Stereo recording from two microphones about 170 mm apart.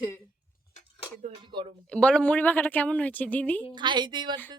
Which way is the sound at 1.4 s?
30° right (ahead or behind).